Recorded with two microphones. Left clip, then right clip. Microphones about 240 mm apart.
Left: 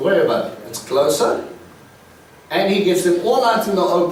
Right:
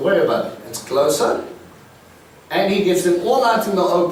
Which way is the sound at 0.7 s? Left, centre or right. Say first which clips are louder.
Left 1 dB; centre.